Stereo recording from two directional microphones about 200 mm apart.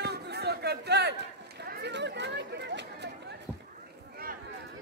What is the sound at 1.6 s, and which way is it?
Chatter, 55° right (ahead or behind).